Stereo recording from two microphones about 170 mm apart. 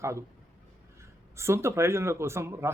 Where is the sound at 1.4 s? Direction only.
15° right (ahead or behind).